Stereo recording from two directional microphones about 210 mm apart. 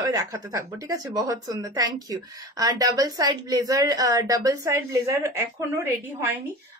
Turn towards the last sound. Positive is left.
turn(degrees=-10)  # may be behind; listen again after turning